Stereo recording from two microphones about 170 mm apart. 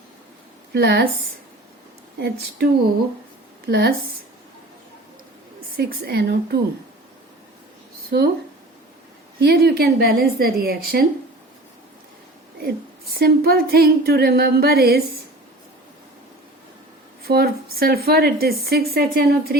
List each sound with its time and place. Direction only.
0.7 s a woman's voice: 70° right (ahead or behind)
2.1 s a woman's voice: 75° right (ahead or behind)
3.7 s a woman's voice: 70° right (ahead or behind)
5.7 s a woman's voice: 65° right (ahead or behind)
8.1 s a woman's voice: 70° right (ahead or behind)
9.4 s a woman's voice: 70° right (ahead or behind)
13.1 s a woman's voice: 65° right (ahead or behind)
17.2 s a woman's voice: 65° right (ahead or behind)